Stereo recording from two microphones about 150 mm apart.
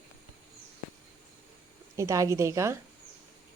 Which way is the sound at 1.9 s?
20° right (ahead or behind).